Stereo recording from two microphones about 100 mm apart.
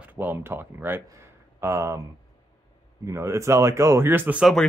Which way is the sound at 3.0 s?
30° right (ahead or behind).